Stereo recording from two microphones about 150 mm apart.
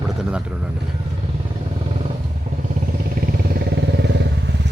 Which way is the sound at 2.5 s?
50° right (ahead or behind).